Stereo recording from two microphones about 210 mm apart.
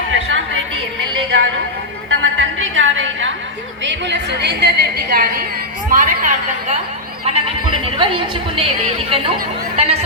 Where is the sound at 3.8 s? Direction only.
55° right (ahead or behind).